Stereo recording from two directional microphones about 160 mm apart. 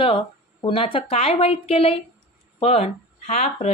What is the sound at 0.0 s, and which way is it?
Speech, 35° left (ahead or behind).